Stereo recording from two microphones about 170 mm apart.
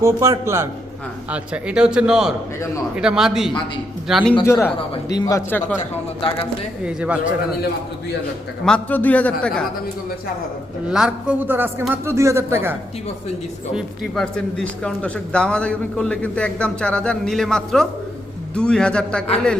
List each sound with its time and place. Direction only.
0.0 s a man's voice: 15° right (ahead or behind); by 4.4 s centre (ahead or behind)
4.4 s speech: 15° left (ahead or behind)
6.8 s a man's voice: 5° right (ahead or behind)
8.6 s a man's voice: 5° left (ahead or behind)
10.8 s a man's voice: 5° right (ahead or behind)
13.7 s a man's voice: 5° left (ahead or behind)